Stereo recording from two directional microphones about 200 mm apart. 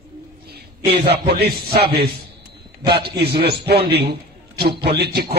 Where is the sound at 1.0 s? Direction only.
55° right (ahead or behind).